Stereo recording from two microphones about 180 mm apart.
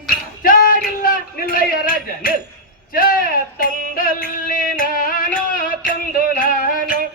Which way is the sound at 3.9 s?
50° left (ahead or behind).